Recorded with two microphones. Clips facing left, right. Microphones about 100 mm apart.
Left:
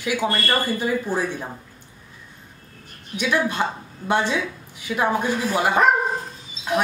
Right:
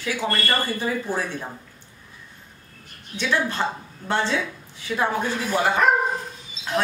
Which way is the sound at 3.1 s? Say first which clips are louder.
Left 2 dB; 15° left (ahead or behind).